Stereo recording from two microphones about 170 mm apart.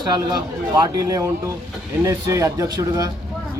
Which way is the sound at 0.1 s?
25° right (ahead or behind).